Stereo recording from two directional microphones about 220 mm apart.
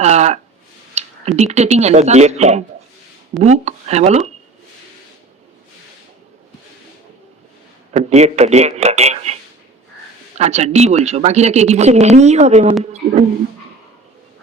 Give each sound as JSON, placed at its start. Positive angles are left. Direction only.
{"t": 0.0, "sound": "speech", "side_deg": -30}
{"t": 7.9, "sound": "speech", "side_deg": -30}